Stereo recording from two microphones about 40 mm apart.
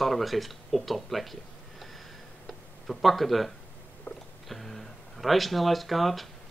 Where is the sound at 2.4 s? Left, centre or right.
Centre.